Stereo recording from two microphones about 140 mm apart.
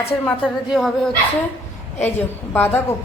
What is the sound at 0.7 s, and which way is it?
Speech, centre (ahead or behind).